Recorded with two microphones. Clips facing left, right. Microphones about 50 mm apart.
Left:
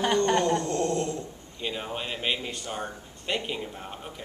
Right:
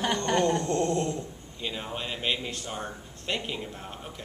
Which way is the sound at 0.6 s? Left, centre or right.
Right.